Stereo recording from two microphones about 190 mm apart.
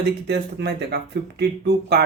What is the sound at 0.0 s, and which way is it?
Speech, 60° right (ahead or behind).